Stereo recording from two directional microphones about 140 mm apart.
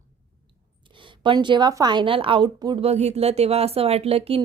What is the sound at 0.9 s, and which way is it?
A woman's voice, 35° right (ahead or behind).